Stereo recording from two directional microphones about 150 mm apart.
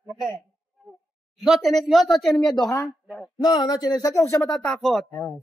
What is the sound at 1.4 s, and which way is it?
Speech, centre (ahead or behind).